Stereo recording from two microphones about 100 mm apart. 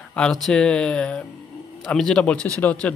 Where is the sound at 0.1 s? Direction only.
5° left (ahead or behind).